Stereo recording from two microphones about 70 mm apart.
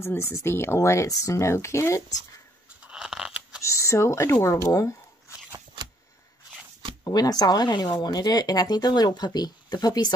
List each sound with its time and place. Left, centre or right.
0.0 s speech: left
0.7 s speech: left
2.9 s a sound: centre
3.6 s speech: left
7.1 s speech: left